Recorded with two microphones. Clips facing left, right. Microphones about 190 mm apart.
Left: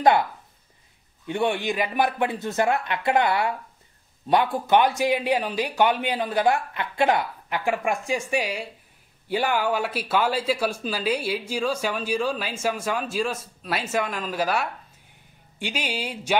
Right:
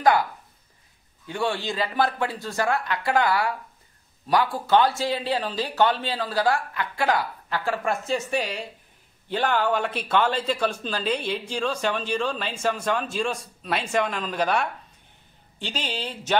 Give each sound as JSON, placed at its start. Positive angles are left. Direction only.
{"t": 0.0, "sound": "speech", "side_deg": 25}